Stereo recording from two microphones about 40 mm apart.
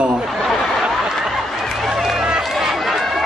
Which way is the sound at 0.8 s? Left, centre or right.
Centre.